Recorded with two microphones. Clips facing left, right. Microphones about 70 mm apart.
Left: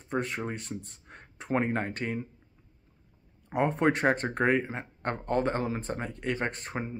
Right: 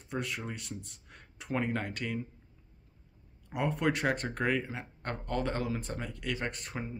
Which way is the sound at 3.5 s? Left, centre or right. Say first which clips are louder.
Left 5 dB; left.